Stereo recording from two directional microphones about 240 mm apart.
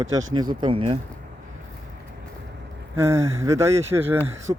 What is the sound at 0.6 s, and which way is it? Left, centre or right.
Speech, right.